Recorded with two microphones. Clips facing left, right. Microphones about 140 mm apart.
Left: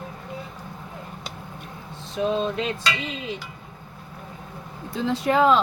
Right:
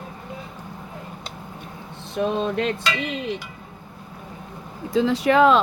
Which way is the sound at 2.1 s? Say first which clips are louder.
Right 1 dB; 60° right (ahead or behind).